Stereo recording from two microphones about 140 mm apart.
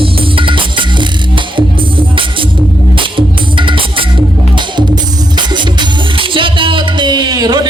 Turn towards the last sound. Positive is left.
turn(degrees=-30)  # may be behind; listen again after turning